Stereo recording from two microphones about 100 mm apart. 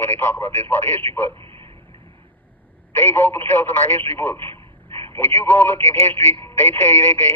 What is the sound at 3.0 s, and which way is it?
Speech, 25° left (ahead or behind).